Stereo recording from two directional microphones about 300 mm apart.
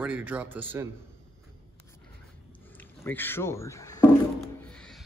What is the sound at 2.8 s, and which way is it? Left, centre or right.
Speech, centre.